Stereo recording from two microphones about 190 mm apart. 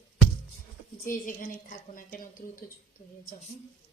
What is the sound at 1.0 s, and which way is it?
Speech, 45° left (ahead or behind).